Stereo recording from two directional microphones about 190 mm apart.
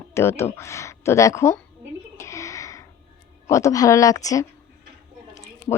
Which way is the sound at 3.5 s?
15° left (ahead or behind).